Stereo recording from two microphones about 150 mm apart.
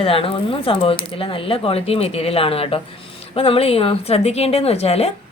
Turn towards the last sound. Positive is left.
turn(degrees=45)  # may be behind; listen again after turning